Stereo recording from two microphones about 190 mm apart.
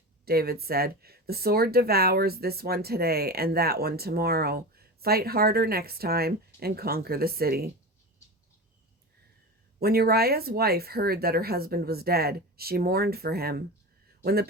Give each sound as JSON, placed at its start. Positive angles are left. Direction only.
{"t": 0.3, "sound": "speech", "side_deg": -55}
{"t": 9.8, "sound": "speech", "side_deg": -55}